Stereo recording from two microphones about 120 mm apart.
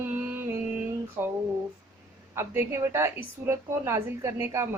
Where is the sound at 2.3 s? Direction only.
20° right (ahead or behind).